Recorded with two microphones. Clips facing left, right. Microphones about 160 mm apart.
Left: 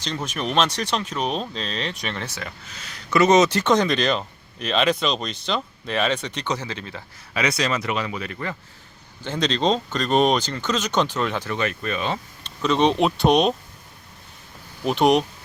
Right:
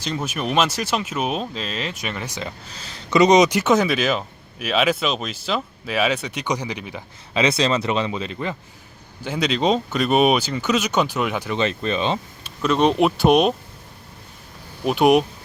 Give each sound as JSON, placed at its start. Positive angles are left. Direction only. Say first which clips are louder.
{"t": 0.0, "sound": "speech", "louder": "right 2 dB", "side_deg": -10}
{"t": 2.6, "sound": "speech", "louder": "right 3 dB", "side_deg": -30}
{"t": 3.1, "sound": "speech", "louder": "right 2 dB", "side_deg": -15}
{"t": 7.3, "sound": "speech", "louder": "right 4 dB", "side_deg": -25}
{"t": 9.2, "sound": "speech", "louder": "right 1 dB", "side_deg": -10}
{"t": 11.5, "sound": "speech", "louder": "right 4 dB", "side_deg": -25}
{"t": 12.4, "sound": "speech", "louder": "even", "side_deg": 0}
{"t": 14.8, "sound": "speech", "louder": "right 2 dB", "side_deg": -5}